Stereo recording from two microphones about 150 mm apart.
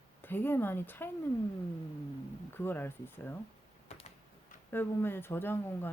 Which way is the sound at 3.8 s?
45° left (ahead or behind).